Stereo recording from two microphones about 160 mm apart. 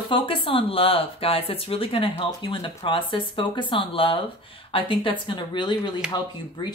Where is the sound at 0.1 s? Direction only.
35° left (ahead or behind).